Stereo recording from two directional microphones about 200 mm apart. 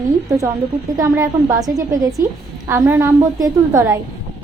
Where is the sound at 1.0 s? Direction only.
15° right (ahead or behind).